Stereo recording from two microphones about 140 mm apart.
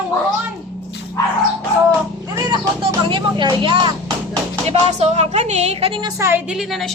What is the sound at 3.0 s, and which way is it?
Speech, 35° right (ahead or behind).